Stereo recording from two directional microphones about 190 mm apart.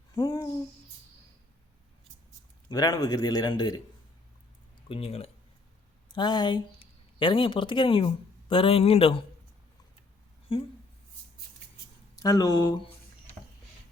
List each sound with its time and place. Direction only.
0.2 s a man's voice: 20° left (ahead or behind)
2.6 s a man's voice: 20° left (ahead or behind)
4.9 s speech: 30° left (ahead or behind)
10.5 s a man's voice: 30° left (ahead or behind)
12.2 s a man's voice: 20° left (ahead or behind)